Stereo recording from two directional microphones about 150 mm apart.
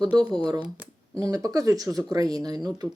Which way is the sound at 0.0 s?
25° right (ahead or behind).